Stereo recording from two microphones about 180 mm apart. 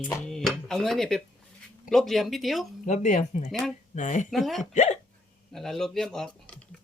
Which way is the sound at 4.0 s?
45° left (ahead or behind).